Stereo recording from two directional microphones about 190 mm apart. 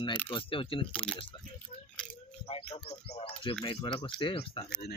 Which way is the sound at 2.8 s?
30° left (ahead or behind).